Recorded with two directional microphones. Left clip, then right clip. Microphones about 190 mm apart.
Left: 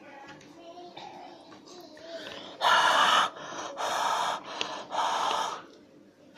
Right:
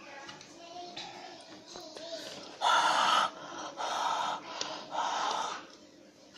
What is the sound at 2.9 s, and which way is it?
Gasp, 45° left (ahead or behind).